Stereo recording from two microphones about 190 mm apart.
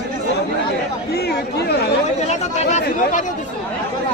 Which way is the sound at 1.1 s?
60° left (ahead or behind).